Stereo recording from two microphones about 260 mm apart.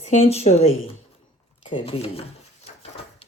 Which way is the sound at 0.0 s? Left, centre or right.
Left.